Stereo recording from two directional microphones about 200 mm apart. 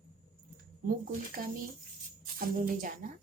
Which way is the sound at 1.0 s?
45° right (ahead or behind).